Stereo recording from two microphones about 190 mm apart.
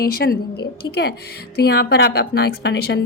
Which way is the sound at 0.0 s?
55° left (ahead or behind).